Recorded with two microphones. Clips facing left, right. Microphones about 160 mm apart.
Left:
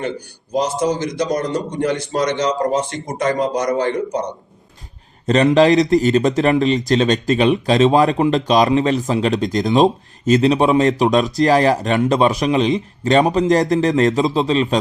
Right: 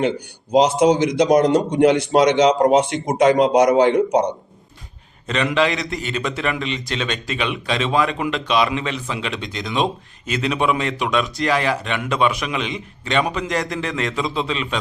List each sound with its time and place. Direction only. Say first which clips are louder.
0.5 s a man's voice: right 4 dB; 65° right (ahead or behind)
5.2 s a man's voice: left 7 dB; 40° left (ahead or behind)